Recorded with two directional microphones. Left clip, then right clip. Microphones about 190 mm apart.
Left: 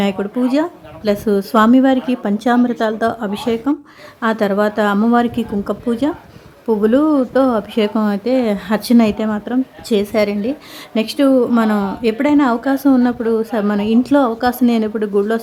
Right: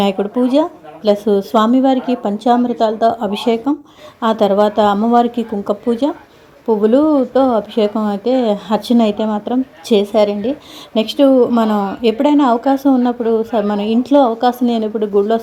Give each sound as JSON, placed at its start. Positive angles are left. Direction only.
{"t": 0.0, "sound": "a woman's voice", "side_deg": -5}
{"t": 4.9, "sound": "a woman's voice", "side_deg": 15}
{"t": 5.3, "sound": "a woman's voice", "side_deg": 5}
{"t": 13.7, "sound": "a woman's voice", "side_deg": 35}
{"t": 14.0, "sound": "a woman's voice", "side_deg": 5}